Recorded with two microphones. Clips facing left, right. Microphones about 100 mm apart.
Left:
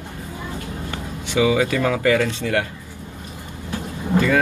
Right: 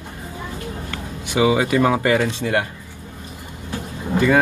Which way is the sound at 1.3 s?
25° right (ahead or behind).